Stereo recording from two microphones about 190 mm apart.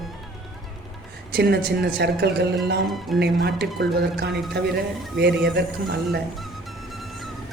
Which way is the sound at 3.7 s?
60° right (ahead or behind).